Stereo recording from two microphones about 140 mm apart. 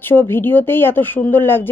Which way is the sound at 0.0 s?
15° left (ahead or behind).